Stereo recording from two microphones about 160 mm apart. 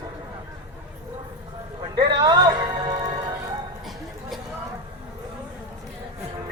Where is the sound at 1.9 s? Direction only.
25° right (ahead or behind).